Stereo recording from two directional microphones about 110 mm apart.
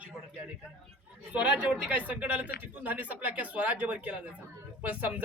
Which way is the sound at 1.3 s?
10° right (ahead or behind).